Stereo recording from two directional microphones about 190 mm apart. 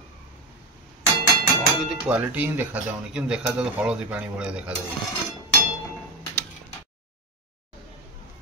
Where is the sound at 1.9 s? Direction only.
5° right (ahead or behind).